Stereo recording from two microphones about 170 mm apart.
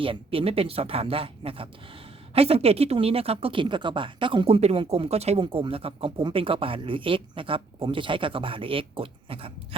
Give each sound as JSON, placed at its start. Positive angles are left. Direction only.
{"t": 0.0, "sound": "speech", "side_deg": -30}